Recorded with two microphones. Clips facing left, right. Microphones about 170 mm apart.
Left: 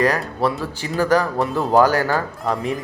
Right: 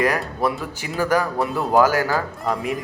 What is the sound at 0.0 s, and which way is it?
Speech, 10° right (ahead or behind).